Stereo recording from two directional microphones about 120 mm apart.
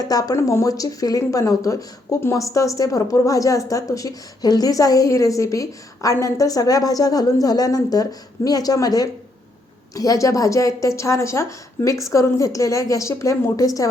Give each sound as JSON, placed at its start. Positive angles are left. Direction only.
{"t": 0.0, "sound": "a woman's voice", "side_deg": 30}